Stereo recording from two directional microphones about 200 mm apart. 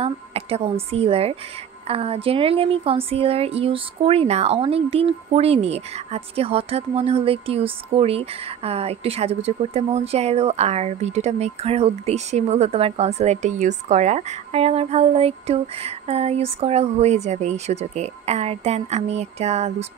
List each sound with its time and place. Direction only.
0.0 s a woman's voice: 30° right (ahead or behind)